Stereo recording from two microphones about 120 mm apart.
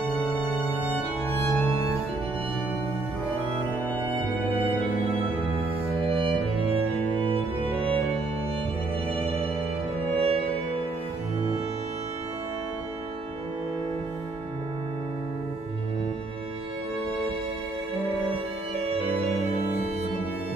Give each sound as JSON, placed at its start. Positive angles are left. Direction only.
{"t": 0.0, "sound": "music", "side_deg": 10}
{"t": 6.0, "sound": "music", "side_deg": -45}
{"t": 9.1, "sound": "music", "side_deg": -50}